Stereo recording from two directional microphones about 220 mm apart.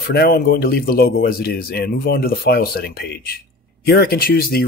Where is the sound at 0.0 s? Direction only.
45° left (ahead or behind).